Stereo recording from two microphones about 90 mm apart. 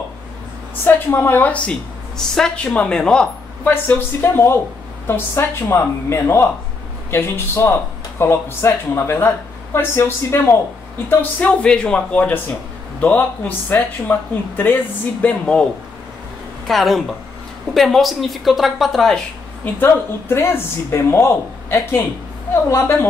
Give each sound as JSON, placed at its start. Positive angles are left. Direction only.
{"t": 0.8, "sound": "a woman's voice", "side_deg": 25}
{"t": 3.7, "sound": "a woman's voice", "side_deg": 25}
{"t": 15.2, "sound": "a woman's voice", "side_deg": 10}
{"t": 16.6, "sound": "a woman's voice", "side_deg": 0}
{"t": 19.6, "sound": "speech", "side_deg": 25}